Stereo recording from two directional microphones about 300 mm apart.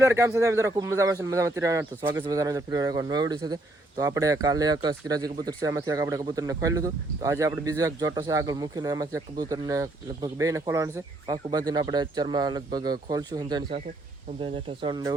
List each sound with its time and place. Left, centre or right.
0.0 s speech: centre